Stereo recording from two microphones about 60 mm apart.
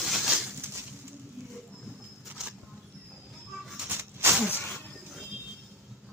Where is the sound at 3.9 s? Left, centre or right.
Right.